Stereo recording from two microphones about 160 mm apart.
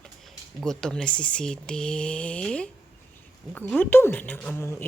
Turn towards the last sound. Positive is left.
turn(degrees=10)  # may be behind; listen again after turning